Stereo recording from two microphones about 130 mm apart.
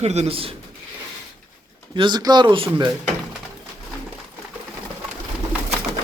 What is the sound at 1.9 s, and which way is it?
Speech, 35° right (ahead or behind).